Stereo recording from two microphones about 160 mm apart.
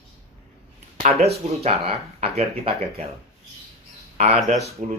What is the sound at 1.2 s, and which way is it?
Speech, 40° right (ahead or behind).